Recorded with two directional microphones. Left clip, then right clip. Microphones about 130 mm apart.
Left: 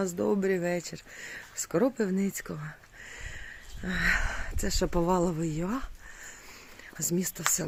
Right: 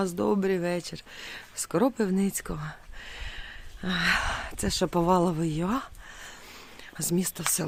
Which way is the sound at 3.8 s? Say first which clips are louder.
Right 2 dB; 45° right (ahead or behind).